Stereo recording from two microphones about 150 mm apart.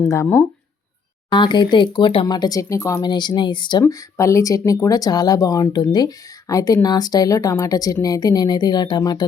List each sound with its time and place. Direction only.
0.0 s speech: 20° left (ahead or behind)
1.3 s speech: 30° left (ahead or behind)